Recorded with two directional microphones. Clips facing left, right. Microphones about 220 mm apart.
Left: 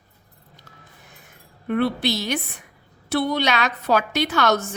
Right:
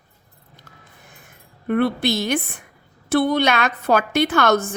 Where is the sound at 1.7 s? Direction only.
50° right (ahead or behind).